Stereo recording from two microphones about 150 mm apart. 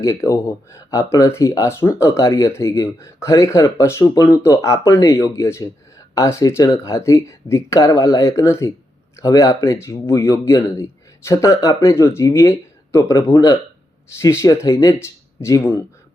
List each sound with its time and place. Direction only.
0.0 s speech: 20° left (ahead or behind)